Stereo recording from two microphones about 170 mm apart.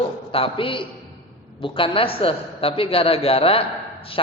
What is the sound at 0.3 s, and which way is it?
A man's voice, 35° left (ahead or behind).